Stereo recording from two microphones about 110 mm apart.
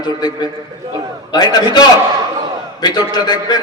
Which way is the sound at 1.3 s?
40° left (ahead or behind).